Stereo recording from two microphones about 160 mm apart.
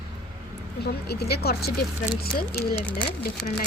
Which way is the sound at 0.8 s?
85° left.